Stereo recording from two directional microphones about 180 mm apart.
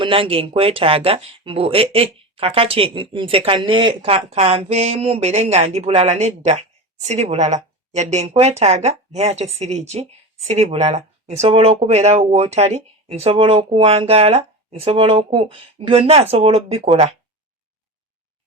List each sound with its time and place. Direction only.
0.0 s speech: 30° right (ahead or behind)